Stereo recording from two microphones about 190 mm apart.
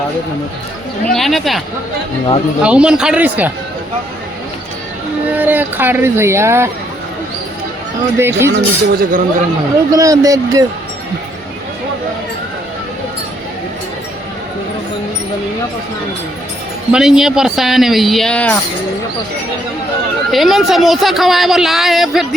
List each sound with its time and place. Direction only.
1.1 s speech: centre (ahead or behind)
5.3 s speech: 10° right (ahead or behind)
8.2 s speech: 10° right (ahead or behind)
8.5 s speech: 55° right (ahead or behind)
9.9 s speech: 20° right (ahead or behind)
16.9 s speech: 5° right (ahead or behind)
20.3 s speech: centre (ahead or behind)